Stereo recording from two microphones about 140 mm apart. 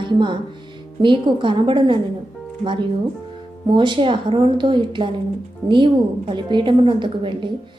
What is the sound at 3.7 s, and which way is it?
A woman's voice, 35° right (ahead or behind).